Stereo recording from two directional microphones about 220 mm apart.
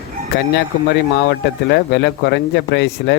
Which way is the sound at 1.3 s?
50° left (ahead or behind).